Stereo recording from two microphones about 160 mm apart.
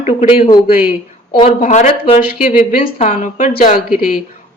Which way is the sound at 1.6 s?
50° left (ahead or behind).